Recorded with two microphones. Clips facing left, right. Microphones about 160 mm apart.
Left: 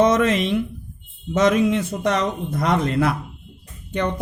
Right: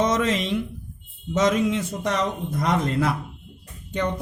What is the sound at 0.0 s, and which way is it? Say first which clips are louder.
Speech: left 5 dB; 60° left (ahead or behind).